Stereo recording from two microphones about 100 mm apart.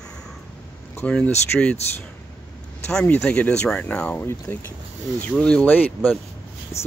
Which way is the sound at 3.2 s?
10° left (ahead or behind).